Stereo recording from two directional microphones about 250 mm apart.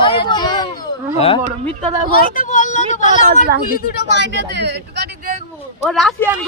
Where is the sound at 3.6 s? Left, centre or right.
Left.